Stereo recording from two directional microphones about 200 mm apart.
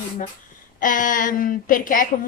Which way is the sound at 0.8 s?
40° left (ahead or behind).